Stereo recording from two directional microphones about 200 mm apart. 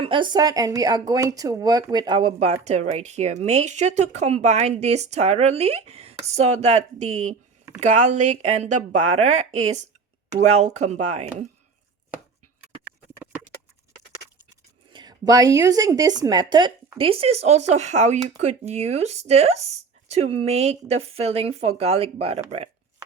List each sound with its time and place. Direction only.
0.0 s speech: 25° right (ahead or behind)
10.6 s speech: 35° right (ahead or behind)
14.9 s speech: 20° right (ahead or behind)